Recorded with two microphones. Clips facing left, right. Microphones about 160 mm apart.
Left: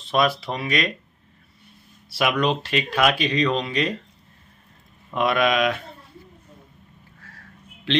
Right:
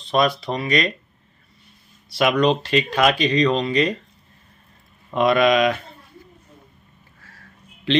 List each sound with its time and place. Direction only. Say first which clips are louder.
0.1 s speech: right 2 dB; 5° left (ahead or behind)
2.0 s speech: right 4 dB; 5° left (ahead or behind)
5.1 s speech: right 4 dB; centre (ahead or behind)